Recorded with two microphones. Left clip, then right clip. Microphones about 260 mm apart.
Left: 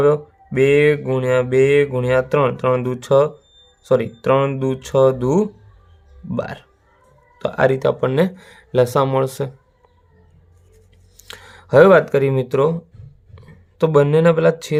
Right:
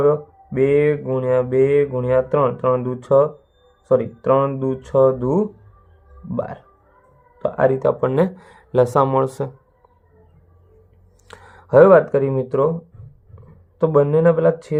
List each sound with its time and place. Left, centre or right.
0.0 s mantra: left
11.2 s speech: left